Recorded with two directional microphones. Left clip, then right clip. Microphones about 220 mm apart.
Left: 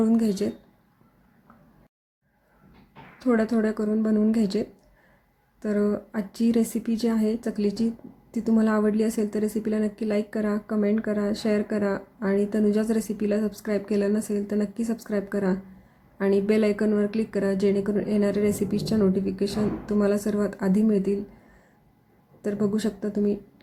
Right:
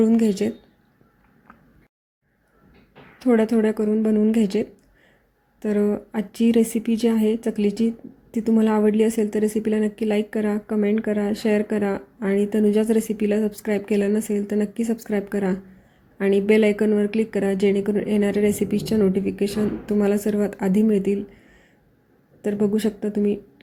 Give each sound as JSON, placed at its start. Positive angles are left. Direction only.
{"t": 0.0, "sound": "a woman's voice", "side_deg": -10}
{"t": 3.2, "sound": "a woman's voice", "side_deg": -5}
{"t": 5.6, "sound": "a woman's voice", "side_deg": -5}
{"t": 22.4, "sound": "a woman's voice", "side_deg": -5}